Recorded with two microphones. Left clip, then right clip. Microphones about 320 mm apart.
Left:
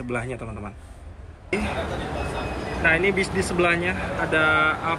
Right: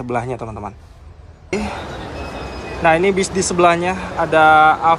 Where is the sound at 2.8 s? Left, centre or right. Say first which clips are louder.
Right 6 dB; centre.